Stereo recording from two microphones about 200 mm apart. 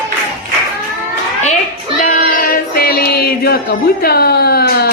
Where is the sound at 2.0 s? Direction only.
40° left (ahead or behind).